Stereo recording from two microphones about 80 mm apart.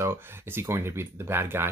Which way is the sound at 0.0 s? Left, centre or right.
Right.